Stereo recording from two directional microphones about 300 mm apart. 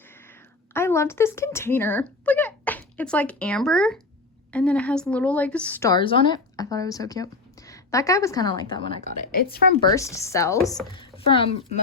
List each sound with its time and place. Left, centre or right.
0.7 s a woman's voice: centre; by 9.8 s left
9.8 s a woman's voice: centre